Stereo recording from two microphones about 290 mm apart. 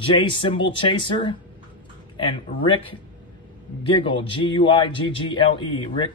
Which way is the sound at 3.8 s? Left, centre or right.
Centre.